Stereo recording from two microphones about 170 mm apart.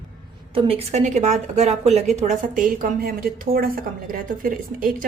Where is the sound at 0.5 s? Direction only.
35° right (ahead or behind).